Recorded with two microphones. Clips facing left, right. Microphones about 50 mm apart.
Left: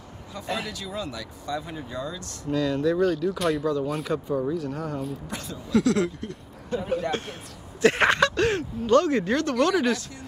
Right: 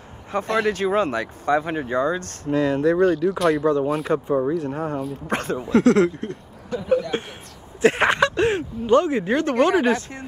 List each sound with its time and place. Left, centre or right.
0.3 s speech: right
3.2 s speech: centre
3.6 s speech: right
5.3 s speech: right
7.1 s speech: right